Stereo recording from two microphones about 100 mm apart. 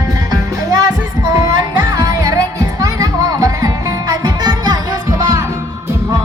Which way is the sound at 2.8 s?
35° right (ahead or behind).